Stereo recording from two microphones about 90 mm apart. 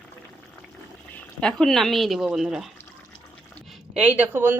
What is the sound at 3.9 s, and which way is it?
Speech, 15° right (ahead or behind).